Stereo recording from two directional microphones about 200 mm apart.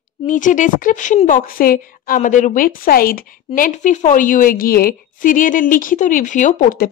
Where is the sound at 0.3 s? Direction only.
40° left (ahead or behind).